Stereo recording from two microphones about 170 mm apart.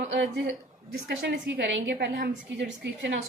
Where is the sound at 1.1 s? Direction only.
80° right.